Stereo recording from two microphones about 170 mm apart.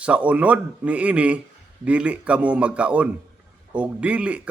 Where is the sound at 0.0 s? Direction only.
5° right (ahead or behind).